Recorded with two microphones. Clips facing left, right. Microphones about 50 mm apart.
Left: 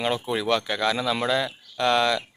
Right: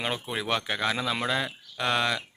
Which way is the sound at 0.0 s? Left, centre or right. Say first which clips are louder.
Left 6 dB; centre.